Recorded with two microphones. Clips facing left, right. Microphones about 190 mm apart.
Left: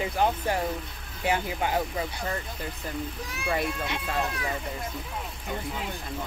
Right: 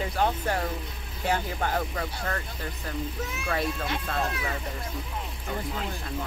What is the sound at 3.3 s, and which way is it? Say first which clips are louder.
Speech: left 2 dB; centre (ahead or behind).